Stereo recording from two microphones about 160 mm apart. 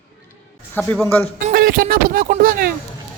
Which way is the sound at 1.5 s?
65° right (ahead or behind).